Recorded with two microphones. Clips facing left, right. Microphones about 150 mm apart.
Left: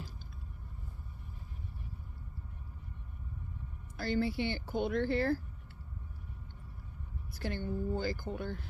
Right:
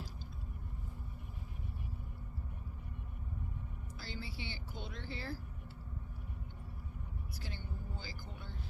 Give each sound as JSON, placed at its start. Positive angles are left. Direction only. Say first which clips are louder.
{"t": 4.0, "sound": "speech", "louder": "left 15 dB", "side_deg": 55}
{"t": 7.3, "sound": "speech", "louder": "left 15 dB", "side_deg": 55}